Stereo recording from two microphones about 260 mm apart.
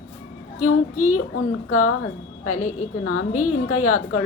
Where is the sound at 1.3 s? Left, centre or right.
Left.